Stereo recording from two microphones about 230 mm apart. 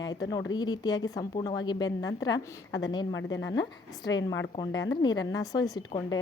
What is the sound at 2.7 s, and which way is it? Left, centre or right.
A woman's voice, left.